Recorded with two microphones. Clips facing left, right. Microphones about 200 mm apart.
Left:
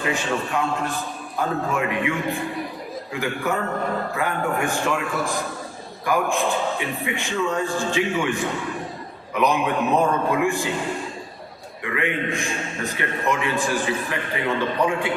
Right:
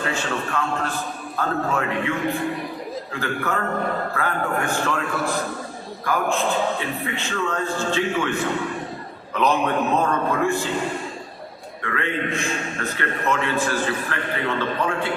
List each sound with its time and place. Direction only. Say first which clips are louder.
0.0 s a man's voice: left 1 dB; 15° left (ahead or behind)
11.8 s a man's voice: left 1 dB; 15° left (ahead or behind)